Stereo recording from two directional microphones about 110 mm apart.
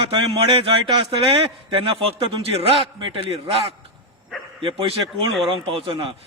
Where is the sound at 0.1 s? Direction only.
55° right (ahead or behind).